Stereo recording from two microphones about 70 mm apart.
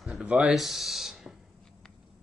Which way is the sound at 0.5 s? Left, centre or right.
Centre.